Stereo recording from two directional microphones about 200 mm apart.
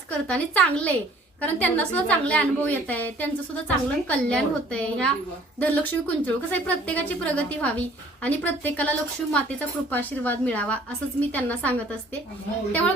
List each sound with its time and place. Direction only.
0.3 s a woman's voice: 5° left (ahead or behind)